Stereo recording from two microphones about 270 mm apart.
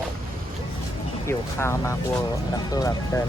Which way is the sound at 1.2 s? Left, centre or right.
Centre.